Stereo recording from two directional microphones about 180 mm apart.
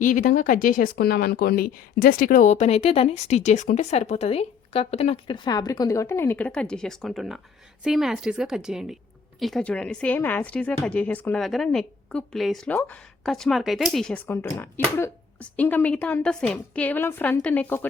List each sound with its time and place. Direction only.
0.0 s speech: 45° left (ahead or behind)
5.5 s speech: 20° left (ahead or behind); by 14.2 s centre (ahead or behind)
14.3 s speech: 15° left (ahead or behind)